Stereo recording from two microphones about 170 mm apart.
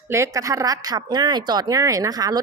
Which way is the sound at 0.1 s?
20° right (ahead or behind).